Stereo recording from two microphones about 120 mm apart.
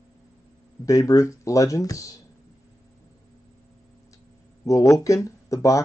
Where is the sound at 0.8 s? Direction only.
25° left (ahead or behind).